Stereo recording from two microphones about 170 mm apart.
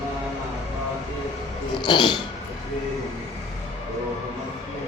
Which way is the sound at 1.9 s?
25° left (ahead or behind).